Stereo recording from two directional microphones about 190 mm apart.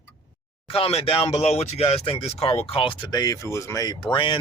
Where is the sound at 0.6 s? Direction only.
30° left (ahead or behind).